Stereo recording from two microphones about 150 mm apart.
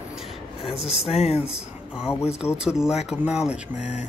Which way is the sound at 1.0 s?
45° left (ahead or behind).